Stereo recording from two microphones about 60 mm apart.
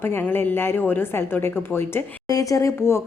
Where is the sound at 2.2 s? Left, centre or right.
Left.